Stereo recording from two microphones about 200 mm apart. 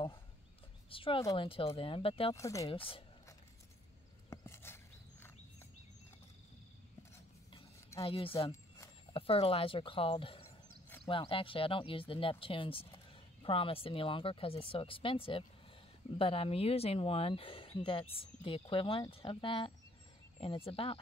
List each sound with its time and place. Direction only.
0.8 s speech: 25° left (ahead or behind)
2.3 s speech: 15° left (ahead or behind)
2.7 s speech: 25° left (ahead or behind)
4.3 s a sound: 15° left (ahead or behind)
7.5 s a sound: 25° left (ahead or behind)
9.1 s speech: 30° left (ahead or behind)